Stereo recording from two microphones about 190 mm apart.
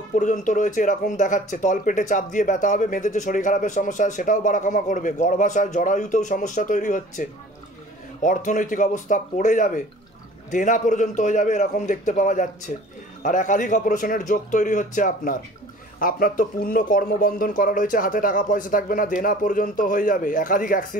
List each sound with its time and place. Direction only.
0.1 s speech: 40° left (ahead or behind)